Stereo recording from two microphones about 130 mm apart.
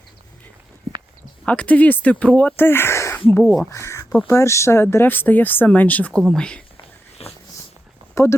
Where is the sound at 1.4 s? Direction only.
10° left (ahead or behind).